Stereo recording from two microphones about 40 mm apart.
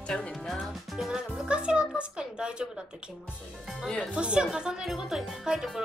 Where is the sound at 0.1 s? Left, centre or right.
Centre.